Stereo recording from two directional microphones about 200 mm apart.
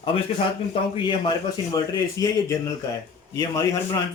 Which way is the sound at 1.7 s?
15° left (ahead or behind).